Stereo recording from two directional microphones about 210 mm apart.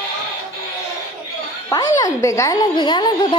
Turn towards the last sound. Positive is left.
turn(degrees=20)  # may be behind; listen again after turning